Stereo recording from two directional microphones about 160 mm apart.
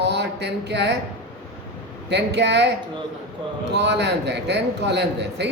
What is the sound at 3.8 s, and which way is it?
A man's voice, 90° right.